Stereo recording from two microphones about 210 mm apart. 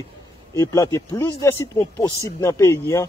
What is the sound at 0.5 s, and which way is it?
Speech, 15° left (ahead or behind).